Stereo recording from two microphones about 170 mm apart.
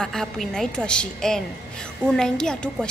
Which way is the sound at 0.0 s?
5° left (ahead or behind).